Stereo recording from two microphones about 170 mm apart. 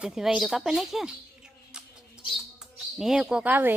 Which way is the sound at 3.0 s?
5° right (ahead or behind).